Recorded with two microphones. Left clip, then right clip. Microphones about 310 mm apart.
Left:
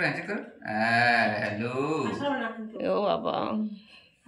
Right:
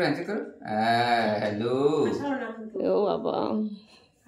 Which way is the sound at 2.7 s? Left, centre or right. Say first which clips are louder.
Right 2 dB; centre.